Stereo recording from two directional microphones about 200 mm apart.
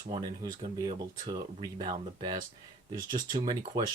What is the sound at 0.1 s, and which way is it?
Speech, 20° right (ahead or behind).